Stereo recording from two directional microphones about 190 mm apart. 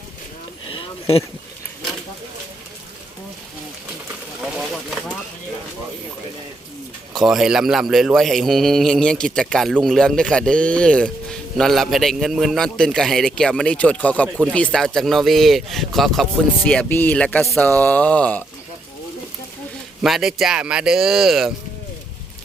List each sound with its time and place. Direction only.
0.7 s a sound: 30° left (ahead or behind)
4.4 s vehicle: 5° right (ahead or behind)
7.2 s speech: centre (ahead or behind)
20.0 s speech: centre (ahead or behind)